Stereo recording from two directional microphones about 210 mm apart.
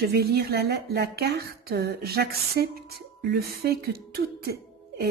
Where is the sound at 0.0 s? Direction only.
50° right (ahead or behind).